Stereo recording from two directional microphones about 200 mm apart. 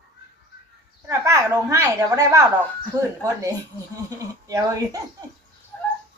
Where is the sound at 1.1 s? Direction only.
15° right (ahead or behind).